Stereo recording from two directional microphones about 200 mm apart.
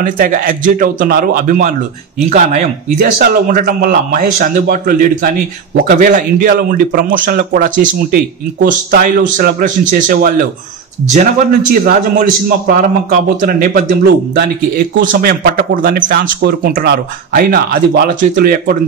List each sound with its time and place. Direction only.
0.0 s speech: 45° right (ahead or behind)
15.0 s speech: 45° right (ahead or behind)